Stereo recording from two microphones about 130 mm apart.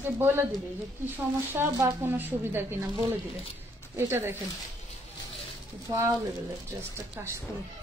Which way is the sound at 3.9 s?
20° right (ahead or behind).